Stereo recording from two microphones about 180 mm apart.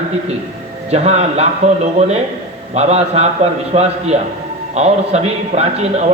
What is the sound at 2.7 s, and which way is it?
A man's voice, 35° right (ahead or behind).